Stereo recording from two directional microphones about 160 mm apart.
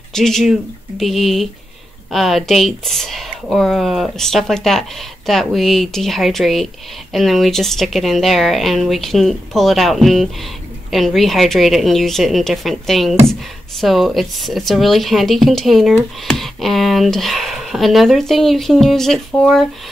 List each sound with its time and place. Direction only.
0.1 s speech: centre (ahead or behind)